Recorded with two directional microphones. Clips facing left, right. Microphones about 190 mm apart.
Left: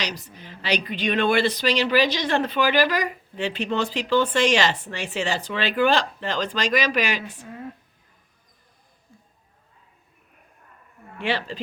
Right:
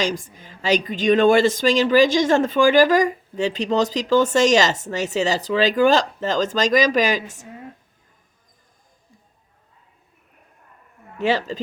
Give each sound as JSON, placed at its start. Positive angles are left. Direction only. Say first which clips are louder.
{"t": 0.0, "sound": "a woman's voice", "louder": "right 8 dB", "side_deg": -50}
{"t": 11.2, "sound": "speech", "louder": "right 6 dB", "side_deg": -40}